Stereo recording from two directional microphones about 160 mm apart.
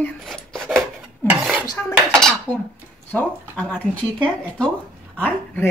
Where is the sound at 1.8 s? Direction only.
10° left (ahead or behind).